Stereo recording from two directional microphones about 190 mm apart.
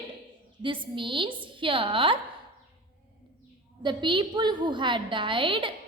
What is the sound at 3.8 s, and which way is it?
A woman's voice, 25° right (ahead or behind).